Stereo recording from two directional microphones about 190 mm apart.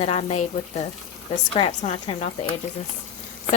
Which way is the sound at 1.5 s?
25° left (ahead or behind).